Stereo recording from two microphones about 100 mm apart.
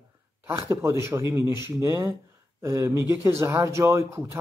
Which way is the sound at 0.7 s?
30° right (ahead or behind).